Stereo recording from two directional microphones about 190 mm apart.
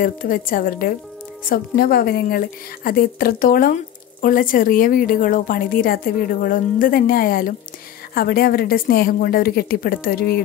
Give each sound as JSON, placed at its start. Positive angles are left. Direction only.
{"t": 0.0, "sound": "a woman's voice", "side_deg": 45}